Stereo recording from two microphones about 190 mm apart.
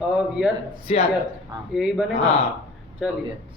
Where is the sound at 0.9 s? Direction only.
35° left (ahead or behind).